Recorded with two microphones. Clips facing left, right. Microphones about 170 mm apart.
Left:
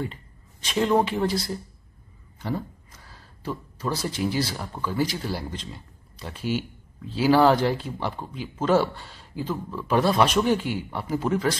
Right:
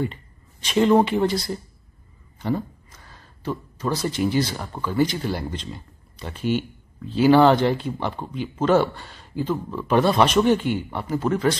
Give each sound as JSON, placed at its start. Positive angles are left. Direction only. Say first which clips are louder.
{"t": 0.7, "sound": "speech", "louder": "right 5 dB", "side_deg": 0}
{"t": 2.3, "sound": "a sound", "louder": "right 5 dB", "side_deg": 0}
{"t": 4.8, "sound": "speech", "louder": "right 4 dB", "side_deg": 5}